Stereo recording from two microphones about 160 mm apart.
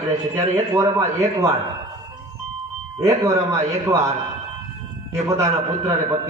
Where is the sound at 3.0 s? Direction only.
20° right (ahead or behind).